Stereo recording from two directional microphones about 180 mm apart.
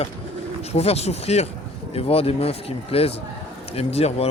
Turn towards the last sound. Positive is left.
turn(degrees=35)  # may be behind; listen again after turning